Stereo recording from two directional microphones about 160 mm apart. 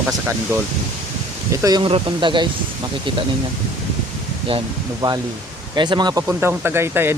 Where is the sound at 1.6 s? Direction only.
30° right (ahead or behind).